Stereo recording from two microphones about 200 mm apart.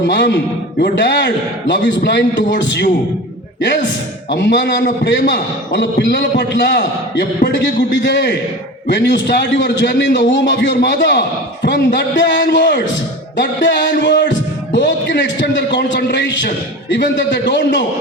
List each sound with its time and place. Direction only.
0.1 s a man's voice: 60° left (ahead or behind)
4.3 s a man's voice: 60° left (ahead or behind)